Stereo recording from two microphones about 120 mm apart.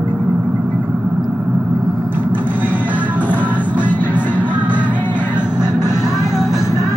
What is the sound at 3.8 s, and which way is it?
Music, 15° left (ahead or behind).